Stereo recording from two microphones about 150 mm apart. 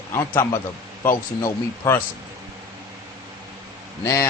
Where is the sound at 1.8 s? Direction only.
15° left (ahead or behind).